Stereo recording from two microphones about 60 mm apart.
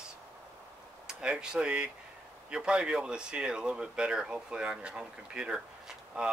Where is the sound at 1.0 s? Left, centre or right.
Centre.